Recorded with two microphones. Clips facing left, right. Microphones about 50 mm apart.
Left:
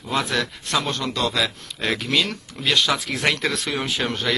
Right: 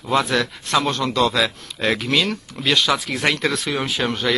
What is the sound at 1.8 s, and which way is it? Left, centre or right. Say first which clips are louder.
A man's voice: right 3 dB; right.